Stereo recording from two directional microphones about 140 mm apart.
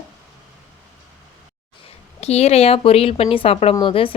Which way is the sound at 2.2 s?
50° left (ahead or behind).